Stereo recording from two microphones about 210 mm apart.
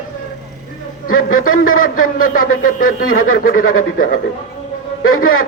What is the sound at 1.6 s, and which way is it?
Speech, 75° left (ahead or behind).